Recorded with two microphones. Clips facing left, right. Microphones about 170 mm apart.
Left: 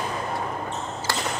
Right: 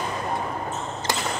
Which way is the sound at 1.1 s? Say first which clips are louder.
Right 1 dB; 20° right (ahead or behind).